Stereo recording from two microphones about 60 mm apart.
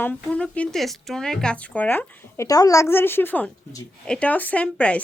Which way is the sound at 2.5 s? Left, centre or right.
Left.